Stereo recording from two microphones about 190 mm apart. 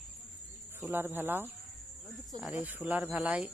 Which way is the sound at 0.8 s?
10° right (ahead or behind).